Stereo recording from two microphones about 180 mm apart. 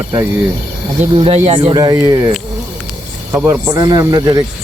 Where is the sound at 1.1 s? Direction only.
30° right (ahead or behind).